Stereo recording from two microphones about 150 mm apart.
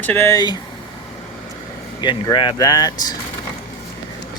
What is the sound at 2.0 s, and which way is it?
Speech, 30° left (ahead or behind).